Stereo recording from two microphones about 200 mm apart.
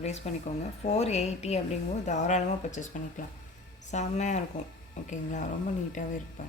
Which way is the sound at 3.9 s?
35° left (ahead or behind).